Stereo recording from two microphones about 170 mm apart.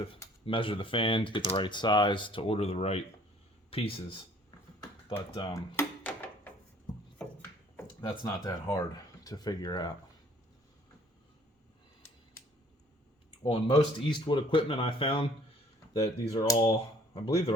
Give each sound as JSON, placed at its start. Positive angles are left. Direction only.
{"t": 0.4, "sound": "speech", "side_deg": 30}
{"t": 5.7, "sound": "a sound", "side_deg": 10}
{"t": 8.0, "sound": "speech", "side_deg": 25}
{"t": 13.4, "sound": "speech", "side_deg": 30}